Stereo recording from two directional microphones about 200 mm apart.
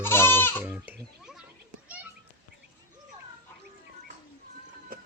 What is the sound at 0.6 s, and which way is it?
Children playing, 10° right (ahead or behind).